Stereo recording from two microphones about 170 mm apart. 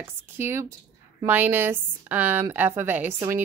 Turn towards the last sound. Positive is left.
turn(degrees=-15)  # may be behind; listen again after turning